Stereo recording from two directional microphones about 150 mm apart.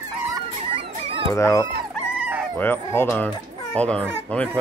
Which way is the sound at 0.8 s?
35° right (ahead or behind).